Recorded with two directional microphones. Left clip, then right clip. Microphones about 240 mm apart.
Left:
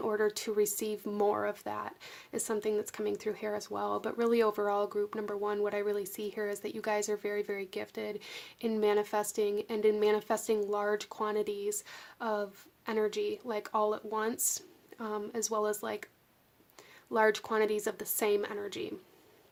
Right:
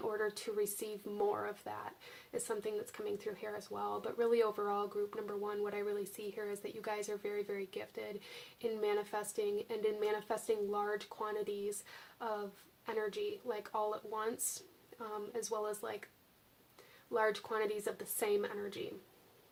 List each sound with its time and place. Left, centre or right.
0.2 s speech: left
12.8 s speech: left
17.2 s speech: left